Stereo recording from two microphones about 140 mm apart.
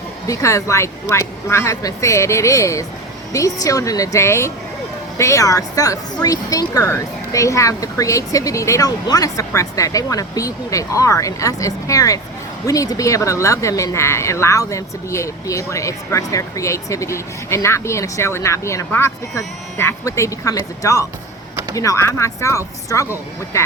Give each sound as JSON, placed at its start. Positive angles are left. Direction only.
{"t": 0.3, "sound": "speech", "side_deg": 20}